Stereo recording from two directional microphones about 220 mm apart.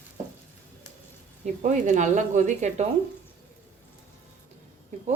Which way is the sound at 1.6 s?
35° right (ahead or behind).